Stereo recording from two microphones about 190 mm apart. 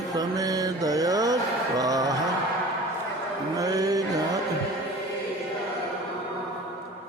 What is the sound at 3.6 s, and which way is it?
Music, 20° right (ahead or behind).